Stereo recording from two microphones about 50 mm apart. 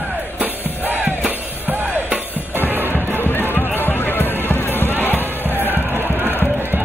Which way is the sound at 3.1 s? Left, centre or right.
Left.